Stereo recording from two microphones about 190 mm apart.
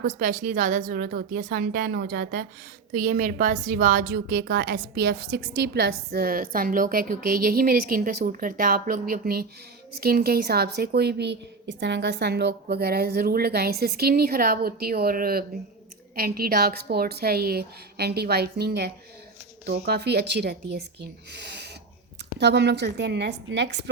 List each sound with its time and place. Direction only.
0.0 s a woman's voice: 45° right (ahead or behind); by 23.9 s 65° right (ahead or behind)